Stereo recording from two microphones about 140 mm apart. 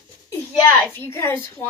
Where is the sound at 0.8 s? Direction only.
15° left (ahead or behind).